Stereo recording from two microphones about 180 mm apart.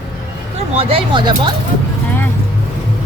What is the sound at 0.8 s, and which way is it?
Speech, 30° right (ahead or behind).